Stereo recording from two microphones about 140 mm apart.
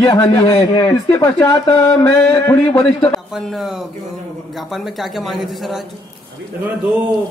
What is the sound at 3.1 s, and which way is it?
Speech, centre (ahead or behind).